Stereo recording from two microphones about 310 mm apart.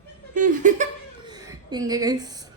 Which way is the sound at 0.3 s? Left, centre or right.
Right.